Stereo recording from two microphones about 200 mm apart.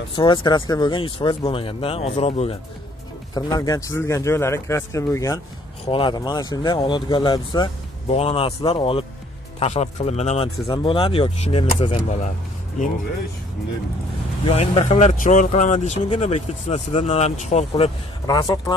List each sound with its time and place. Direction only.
0.1 s speech: 25° left (ahead or behind)
3.3 s speech: 20° left (ahead or behind)
14.4 s speech: 30° left (ahead or behind)
18.2 s speech: 20° left (ahead or behind)